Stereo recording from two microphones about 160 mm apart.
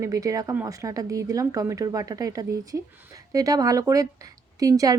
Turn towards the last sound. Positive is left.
turn(degrees=-20)  # may be behind; listen again after turning